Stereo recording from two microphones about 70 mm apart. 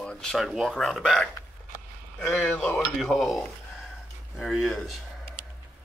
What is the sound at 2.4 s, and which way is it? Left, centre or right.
Speech, centre.